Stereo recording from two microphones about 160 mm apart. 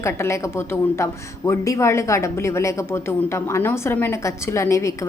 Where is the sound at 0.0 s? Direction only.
15° left (ahead or behind).